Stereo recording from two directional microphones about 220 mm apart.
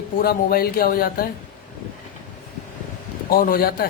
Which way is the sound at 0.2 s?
45° left (ahead or behind).